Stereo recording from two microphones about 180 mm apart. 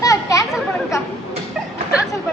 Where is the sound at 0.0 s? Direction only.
20° left (ahead or behind).